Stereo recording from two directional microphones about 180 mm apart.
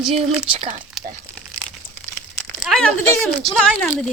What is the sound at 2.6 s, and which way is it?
Speech, centre (ahead or behind).